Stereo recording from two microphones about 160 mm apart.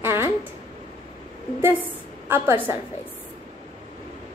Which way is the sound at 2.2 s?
15° right (ahead or behind).